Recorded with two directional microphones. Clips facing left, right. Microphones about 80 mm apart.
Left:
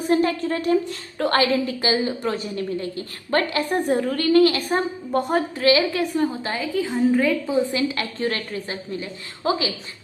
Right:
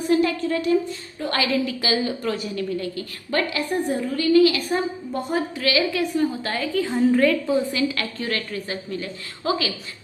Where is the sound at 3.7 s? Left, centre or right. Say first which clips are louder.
Left 3 dB; left.